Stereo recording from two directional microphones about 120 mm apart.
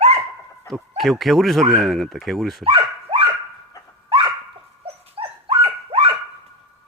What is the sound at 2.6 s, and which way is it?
Dog, 50° right (ahead or behind).